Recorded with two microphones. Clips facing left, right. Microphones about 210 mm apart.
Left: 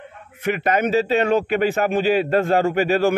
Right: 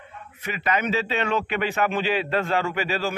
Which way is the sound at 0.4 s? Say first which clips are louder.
Left 6 dB; 55° left (ahead or behind).